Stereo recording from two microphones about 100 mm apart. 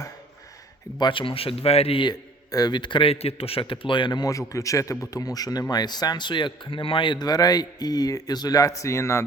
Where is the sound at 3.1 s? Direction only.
85° left; by 4.3 s 50° left (ahead or behind).